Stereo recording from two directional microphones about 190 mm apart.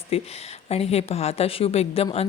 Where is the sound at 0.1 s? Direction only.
35° left (ahead or behind).